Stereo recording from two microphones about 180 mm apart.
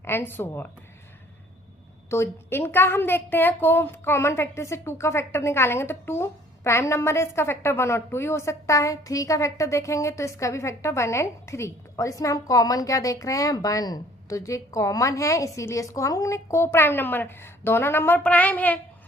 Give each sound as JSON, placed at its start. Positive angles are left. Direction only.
{"t": 0.0, "sound": "a woman's voice", "side_deg": 10}
{"t": 2.0, "sound": "a woman's voice", "side_deg": 15}